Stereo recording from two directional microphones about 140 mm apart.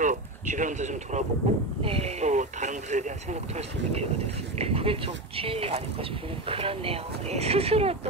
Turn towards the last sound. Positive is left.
turn(degrees=-45)  # may be behind; listen again after turning